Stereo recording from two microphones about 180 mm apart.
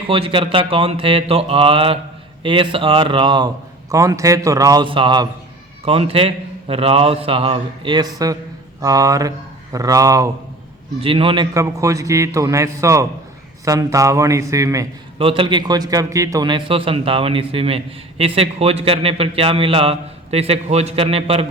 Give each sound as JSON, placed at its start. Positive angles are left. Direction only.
{"t": 0.1, "sound": "a man's voice", "side_deg": -30}
{"t": 11.0, "sound": "a man's voice", "side_deg": -30}
{"t": 11.5, "sound": "a man's voice", "side_deg": -15}
{"t": 15.2, "sound": "a man's voice", "side_deg": -30}